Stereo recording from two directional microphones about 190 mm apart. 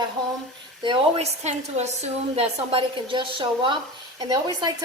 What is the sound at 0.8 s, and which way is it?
A woman's voice, 30° right (ahead or behind).